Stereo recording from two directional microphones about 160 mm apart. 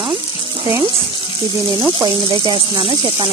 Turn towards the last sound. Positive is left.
turn(degrees=-30)  # may be behind; listen again after turning